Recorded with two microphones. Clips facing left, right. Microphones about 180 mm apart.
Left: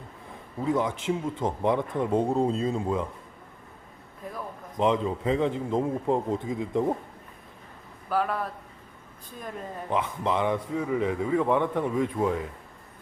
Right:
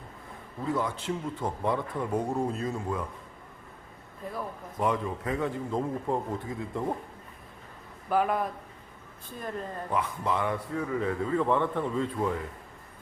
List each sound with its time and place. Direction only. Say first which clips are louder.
0.6 s speech: left 4 dB; 20° left (ahead or behind)
4.8 s speech: left 4 dB; 20° left (ahead or behind)
8.1 s a man's voice: right 1 dB; 10° right (ahead or behind)
9.9 s a man's voice: left 3 dB; 20° left (ahead or behind)